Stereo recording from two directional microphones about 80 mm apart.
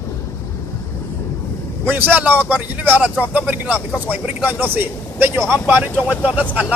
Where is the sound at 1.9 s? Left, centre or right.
Right.